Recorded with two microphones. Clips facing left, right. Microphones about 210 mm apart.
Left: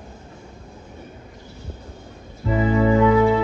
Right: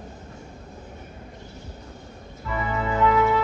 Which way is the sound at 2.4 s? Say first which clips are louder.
Left 9 dB; 30° left (ahead or behind).